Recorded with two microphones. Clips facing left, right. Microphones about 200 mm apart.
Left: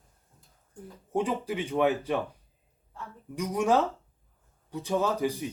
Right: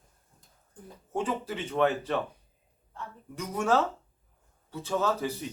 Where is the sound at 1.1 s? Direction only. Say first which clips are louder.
Left 3 dB; 15° left (ahead or behind).